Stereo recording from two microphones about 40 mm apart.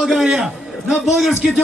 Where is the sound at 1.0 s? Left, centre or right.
Centre.